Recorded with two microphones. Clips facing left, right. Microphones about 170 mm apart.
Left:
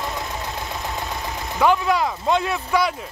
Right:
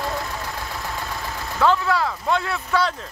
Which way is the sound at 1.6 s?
15° left (ahead or behind).